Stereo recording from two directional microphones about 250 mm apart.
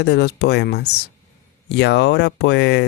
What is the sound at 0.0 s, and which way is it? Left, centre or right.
Speech, left.